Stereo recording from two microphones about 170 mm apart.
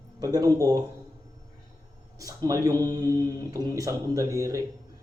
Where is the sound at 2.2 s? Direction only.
20° right (ahead or behind).